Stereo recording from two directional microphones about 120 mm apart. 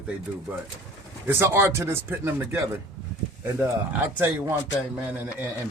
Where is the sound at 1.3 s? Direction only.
20° right (ahead or behind).